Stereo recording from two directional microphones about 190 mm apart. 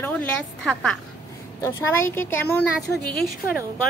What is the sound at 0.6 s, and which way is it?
A woman's voice, 5° left (ahead or behind).